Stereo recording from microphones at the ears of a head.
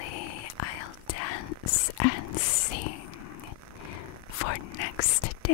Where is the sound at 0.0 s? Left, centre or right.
Left.